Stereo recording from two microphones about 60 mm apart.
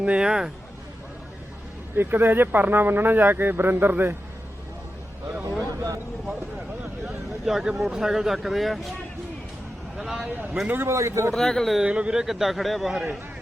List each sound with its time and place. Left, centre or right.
0.0 s speech: centre
2.0 s speech: right
7.4 s speech: centre
10.0 s speech: centre
10.8 s a man's voice: right
11.3 s speech: centre
11.8 s speech: centre
12.2 s speech: centre